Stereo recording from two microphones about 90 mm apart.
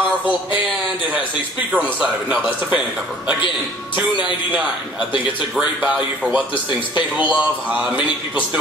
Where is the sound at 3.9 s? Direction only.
20° right (ahead or behind).